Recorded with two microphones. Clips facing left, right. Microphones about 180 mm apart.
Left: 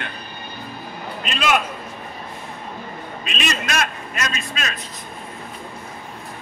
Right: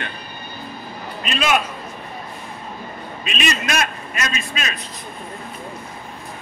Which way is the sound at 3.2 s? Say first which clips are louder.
Right 2 dB; 5° right (ahead or behind).